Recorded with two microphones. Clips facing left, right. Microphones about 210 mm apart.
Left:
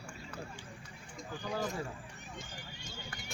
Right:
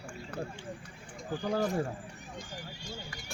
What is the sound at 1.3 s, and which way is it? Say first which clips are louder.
Speech: right 7 dB; 50° right (ahead or behind).